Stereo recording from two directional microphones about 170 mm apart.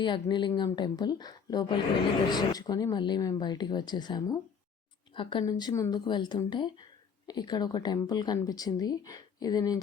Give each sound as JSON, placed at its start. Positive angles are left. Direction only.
{"t": 0.0, "sound": "speech", "side_deg": 25}